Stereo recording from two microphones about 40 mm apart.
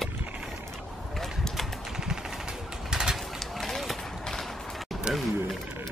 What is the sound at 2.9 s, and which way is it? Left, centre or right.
Bird, centre.